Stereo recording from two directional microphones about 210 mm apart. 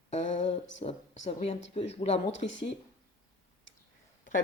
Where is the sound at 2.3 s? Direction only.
60° left (ahead or behind).